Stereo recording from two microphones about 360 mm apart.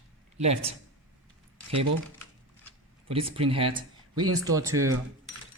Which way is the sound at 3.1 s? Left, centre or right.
Centre.